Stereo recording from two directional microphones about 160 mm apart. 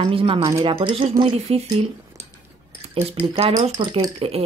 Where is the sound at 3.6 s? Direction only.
30° right (ahead or behind).